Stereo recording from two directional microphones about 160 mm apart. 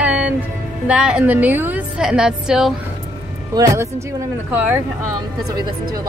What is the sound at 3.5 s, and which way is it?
Speech, 25° right (ahead or behind).